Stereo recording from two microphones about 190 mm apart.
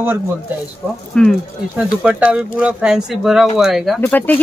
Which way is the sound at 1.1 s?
Centre (ahead or behind).